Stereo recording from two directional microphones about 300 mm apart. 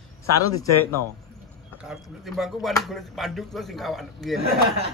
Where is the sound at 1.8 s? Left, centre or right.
Centre.